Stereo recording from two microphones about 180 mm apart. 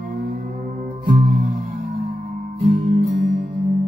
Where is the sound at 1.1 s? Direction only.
50° right (ahead or behind).